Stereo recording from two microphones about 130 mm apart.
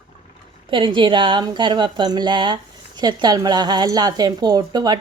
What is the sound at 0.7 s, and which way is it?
Speech, 40° right (ahead or behind).